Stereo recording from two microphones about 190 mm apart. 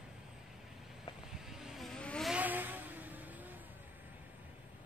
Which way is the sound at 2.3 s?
10° right (ahead or behind).